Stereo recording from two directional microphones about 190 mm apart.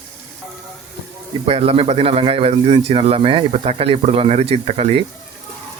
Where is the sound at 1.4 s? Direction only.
30° right (ahead or behind).